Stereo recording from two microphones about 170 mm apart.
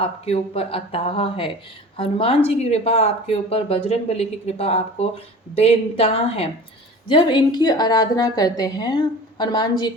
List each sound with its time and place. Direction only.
0.0 s a woman's voice: 35° left (ahead or behind)